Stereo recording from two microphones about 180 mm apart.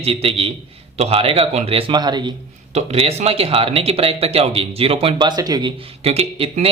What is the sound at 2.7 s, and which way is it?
Speech, 35° right (ahead or behind).